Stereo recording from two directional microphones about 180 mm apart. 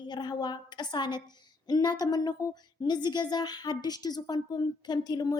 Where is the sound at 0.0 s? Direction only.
25° left (ahead or behind).